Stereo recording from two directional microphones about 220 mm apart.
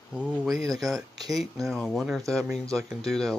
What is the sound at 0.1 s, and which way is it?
Speech, 5° right (ahead or behind).